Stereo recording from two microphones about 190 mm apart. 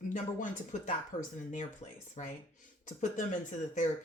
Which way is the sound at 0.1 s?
40° left (ahead or behind).